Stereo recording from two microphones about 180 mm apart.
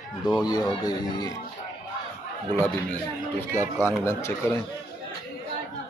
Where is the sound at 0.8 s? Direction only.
20° left (ahead or behind).